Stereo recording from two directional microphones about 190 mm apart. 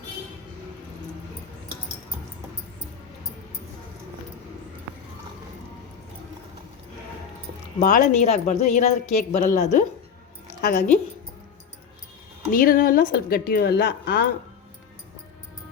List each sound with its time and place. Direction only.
7.8 s speech: 40° left (ahead or behind)
12.5 s speech: 45° left (ahead or behind)